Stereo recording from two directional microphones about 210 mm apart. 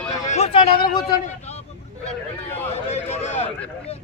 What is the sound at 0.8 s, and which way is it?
Speech, 45° left (ahead or behind).